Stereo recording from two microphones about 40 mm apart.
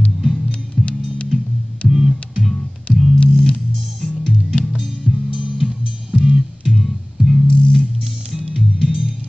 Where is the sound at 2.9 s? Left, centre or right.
Left.